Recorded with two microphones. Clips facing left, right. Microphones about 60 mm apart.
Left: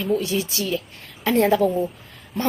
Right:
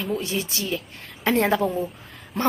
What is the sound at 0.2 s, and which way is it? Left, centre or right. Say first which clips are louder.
A woman's voice: left 3 dB; right.